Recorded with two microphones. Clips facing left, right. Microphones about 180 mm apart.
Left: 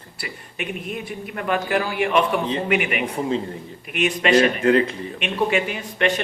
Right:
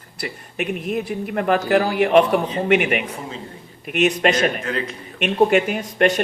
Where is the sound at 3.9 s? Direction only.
40° right (ahead or behind).